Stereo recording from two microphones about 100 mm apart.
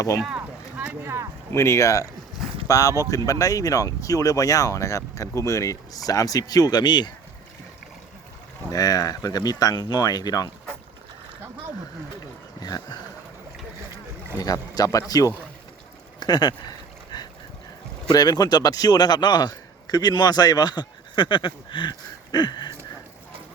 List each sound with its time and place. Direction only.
0.8 s speech: 25° right (ahead or behind)
1.5 s speech: 30° left (ahead or behind); by 7.1 s 45° left (ahead or behind)
8.7 s speech: 40° left (ahead or behind)
12.6 s a sound: 40° left (ahead or behind)
14.3 s speech: 40° left (ahead or behind)
16.2 s a sound: 45° left (ahead or behind)
18.1 s a man's voice: 40° left (ahead or behind)